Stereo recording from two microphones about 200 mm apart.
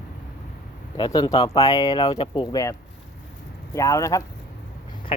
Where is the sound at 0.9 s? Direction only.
20° left (ahead or behind).